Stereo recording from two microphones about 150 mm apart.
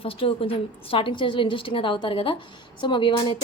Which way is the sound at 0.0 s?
40° left (ahead or behind).